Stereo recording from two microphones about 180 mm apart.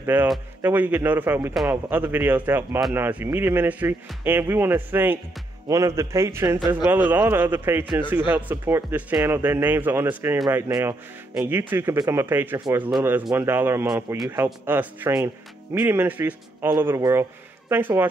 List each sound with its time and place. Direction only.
0.0 s speech: 10° right (ahead or behind)